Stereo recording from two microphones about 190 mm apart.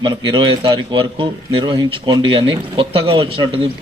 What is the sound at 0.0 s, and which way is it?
A man's voice, 25° right (ahead or behind).